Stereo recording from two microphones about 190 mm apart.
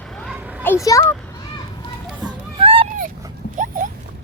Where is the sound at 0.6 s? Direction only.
15° left (ahead or behind).